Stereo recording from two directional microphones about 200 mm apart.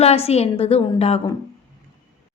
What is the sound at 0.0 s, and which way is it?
A woman's voice, 30° left (ahead or behind).